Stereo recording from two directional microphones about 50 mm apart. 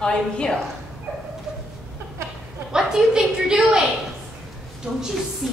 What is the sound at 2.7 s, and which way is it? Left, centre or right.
Speech, centre.